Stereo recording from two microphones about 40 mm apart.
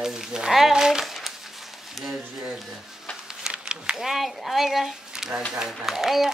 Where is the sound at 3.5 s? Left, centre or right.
Right.